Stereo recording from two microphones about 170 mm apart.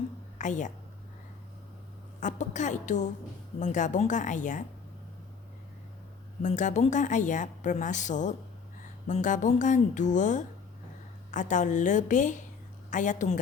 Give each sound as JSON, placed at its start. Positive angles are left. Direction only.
{"t": 0.3, "sound": "speech", "side_deg": 45}
{"t": 2.2, "sound": "a woman's voice", "side_deg": 45}
{"t": 6.4, "sound": "a woman's voice", "side_deg": 45}